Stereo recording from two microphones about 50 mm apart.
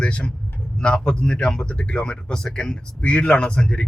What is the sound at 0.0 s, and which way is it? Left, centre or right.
A man's voice, centre.